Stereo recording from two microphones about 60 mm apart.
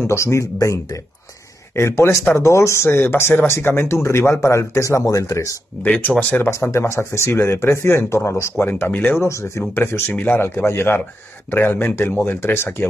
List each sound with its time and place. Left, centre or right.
0.0 s speech: left
1.8 s speech: left
2.9 s speech: left
5.0 s speech: left
5.3 s speech: left
5.8 s speech: left
6.5 s speech: left
8.6 s speech: left
9.2 s speech: left
10.0 s speech: left
10.4 s speech: left